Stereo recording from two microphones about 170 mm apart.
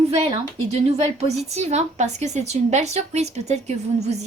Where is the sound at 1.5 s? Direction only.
40° right (ahead or behind).